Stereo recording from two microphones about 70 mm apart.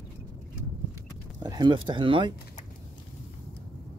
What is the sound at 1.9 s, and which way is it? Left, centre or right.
Speech, right.